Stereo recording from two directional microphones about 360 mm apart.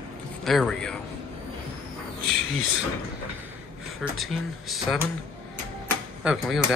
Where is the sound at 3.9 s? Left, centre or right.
Centre.